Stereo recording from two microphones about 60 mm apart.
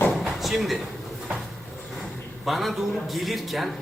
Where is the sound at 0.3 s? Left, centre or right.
Centre.